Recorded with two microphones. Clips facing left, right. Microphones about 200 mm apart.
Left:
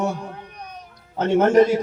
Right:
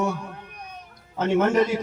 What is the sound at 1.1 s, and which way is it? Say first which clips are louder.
Speech: left 4 dB; 35° left (ahead or behind).